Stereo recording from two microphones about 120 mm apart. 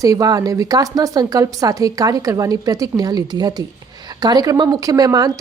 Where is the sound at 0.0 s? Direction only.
30° right (ahead or behind).